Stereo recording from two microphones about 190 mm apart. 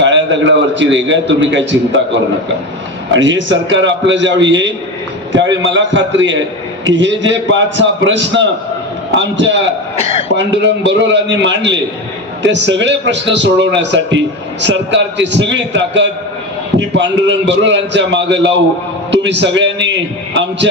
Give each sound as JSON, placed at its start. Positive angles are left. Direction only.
{"t": 0.0, "sound": "a man's voice", "side_deg": -75}
{"t": 3.1, "sound": "a man's voice", "side_deg": -75}